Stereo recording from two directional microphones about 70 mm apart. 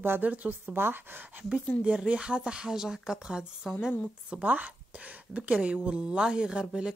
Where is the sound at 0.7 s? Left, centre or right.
Right.